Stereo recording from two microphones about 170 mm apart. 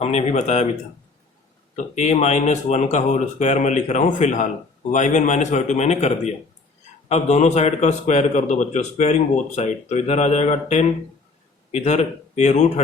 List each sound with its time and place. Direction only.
0.0 s a man's voice: 40° left (ahead or behind)
1.7 s a man's voice: 40° left (ahead or behind)